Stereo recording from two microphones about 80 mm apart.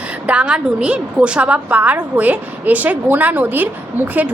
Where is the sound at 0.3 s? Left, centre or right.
Centre.